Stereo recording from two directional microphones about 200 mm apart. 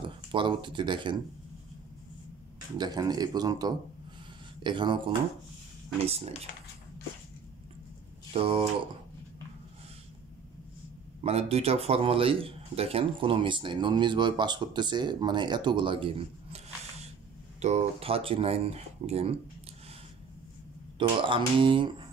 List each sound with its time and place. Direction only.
0.3 s speech: 25° right (ahead or behind)
2.8 s speech: 20° right (ahead or behind)
8.3 s speech: 30° right (ahead or behind)
11.2 s speech: 30° right (ahead or behind)
21.2 s speech: 25° right (ahead or behind)